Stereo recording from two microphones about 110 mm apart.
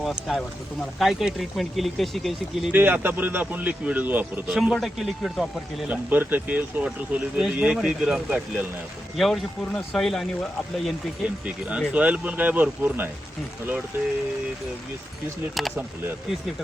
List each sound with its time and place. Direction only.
0.0 s speech: centre (ahead or behind)
2.6 s speech: 15° right (ahead or behind)
4.5 s speech: 5° right (ahead or behind)
5.9 s speech: 15° right (ahead or behind); by 10.9 s 5° left (ahead or behind)
11.4 s speech: 10° right (ahead or behind)
15.6 s speech: centre (ahead or behind)